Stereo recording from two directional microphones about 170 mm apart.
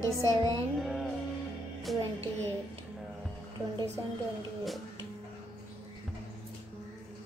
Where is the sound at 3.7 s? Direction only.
20° right (ahead or behind).